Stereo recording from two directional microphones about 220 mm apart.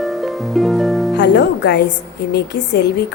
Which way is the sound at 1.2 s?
50° left (ahead or behind).